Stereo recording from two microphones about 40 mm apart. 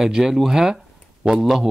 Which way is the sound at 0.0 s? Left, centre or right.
Centre.